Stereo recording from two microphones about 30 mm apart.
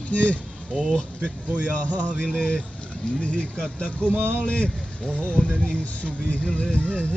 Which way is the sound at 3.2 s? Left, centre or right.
Left.